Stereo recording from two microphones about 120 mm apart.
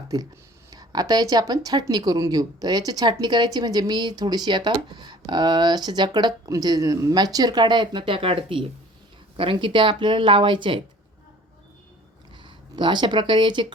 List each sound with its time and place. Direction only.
0.1 s speech: 30° right (ahead or behind)
12.4 s speech: 40° right (ahead or behind)